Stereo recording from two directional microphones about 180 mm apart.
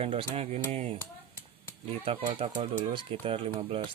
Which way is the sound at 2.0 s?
30° right (ahead or behind).